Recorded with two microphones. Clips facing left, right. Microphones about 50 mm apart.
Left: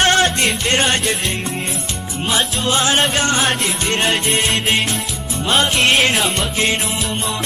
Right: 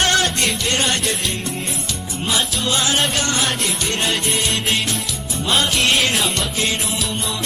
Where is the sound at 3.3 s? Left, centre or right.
Left.